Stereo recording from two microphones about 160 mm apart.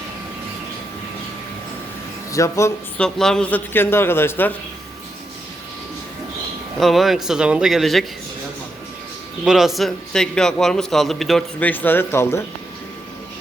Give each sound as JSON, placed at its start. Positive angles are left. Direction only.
{"t": 2.3, "sound": "speech", "side_deg": 20}
{"t": 3.0, "sound": "a man's voice", "side_deg": 5}
{"t": 6.7, "sound": "a man's voice", "side_deg": 0}
{"t": 9.4, "sound": "a man's voice", "side_deg": 0}